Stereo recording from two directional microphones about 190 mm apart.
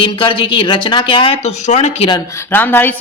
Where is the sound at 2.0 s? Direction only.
15° left (ahead or behind).